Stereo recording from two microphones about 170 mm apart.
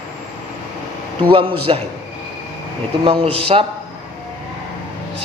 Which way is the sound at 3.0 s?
35° right (ahead or behind).